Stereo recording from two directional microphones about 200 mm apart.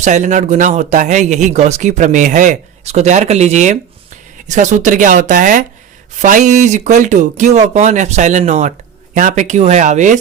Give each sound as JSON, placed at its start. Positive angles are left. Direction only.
{"t": 0.0, "sound": "speech", "side_deg": -35}